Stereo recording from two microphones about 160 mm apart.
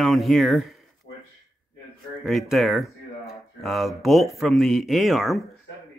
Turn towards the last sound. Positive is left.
turn(degrees=0)  # may be behind; listen again after turning